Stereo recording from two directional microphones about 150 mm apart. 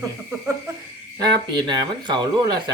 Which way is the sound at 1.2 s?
30° right (ahead or behind).